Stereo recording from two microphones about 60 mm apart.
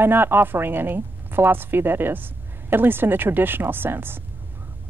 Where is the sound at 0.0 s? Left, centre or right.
Right.